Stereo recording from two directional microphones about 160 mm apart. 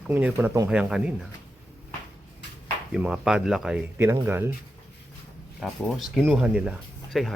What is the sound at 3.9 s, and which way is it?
Speech, 15° right (ahead or behind).